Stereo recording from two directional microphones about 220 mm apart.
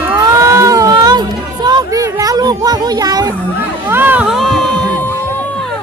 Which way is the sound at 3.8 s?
10° right (ahead or behind).